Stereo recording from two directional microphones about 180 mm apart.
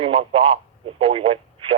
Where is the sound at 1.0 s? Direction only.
30° right (ahead or behind).